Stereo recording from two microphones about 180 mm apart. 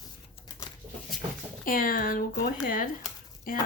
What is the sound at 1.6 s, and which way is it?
Speech, 50° left (ahead or behind).